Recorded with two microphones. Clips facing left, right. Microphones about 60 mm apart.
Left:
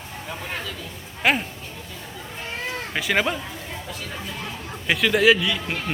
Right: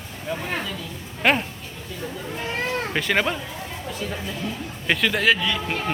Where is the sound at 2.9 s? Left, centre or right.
Centre.